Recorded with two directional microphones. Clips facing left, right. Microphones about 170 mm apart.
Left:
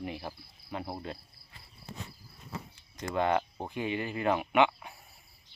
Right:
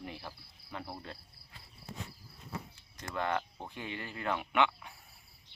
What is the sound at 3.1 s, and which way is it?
Speech, 15° left (ahead or behind).